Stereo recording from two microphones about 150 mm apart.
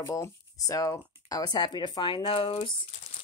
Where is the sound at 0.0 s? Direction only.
20° left (ahead or behind); by 2.7 s 35° left (ahead or behind).